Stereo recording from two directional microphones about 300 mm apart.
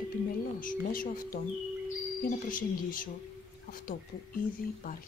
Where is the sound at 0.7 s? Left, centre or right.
Left.